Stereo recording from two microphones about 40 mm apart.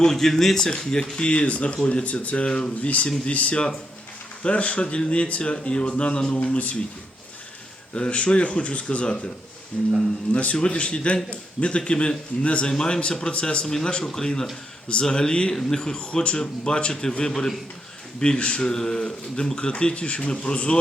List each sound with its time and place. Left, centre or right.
0.0 s a man's voice: centre
2.8 s speech: left
7.9 s speech: left
12.7 s speech: left
13.8 s a man's voice: centre
18.2 s speech: left
18.6 s speech: centre